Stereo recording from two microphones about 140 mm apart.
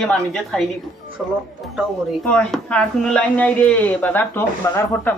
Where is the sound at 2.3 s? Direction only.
5° left (ahead or behind).